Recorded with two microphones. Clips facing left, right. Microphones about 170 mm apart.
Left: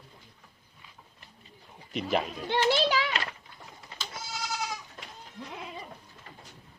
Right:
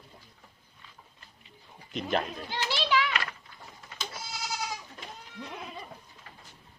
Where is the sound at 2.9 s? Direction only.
30° left (ahead or behind).